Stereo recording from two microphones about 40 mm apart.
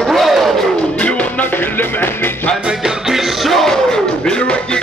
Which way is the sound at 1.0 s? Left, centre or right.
Left.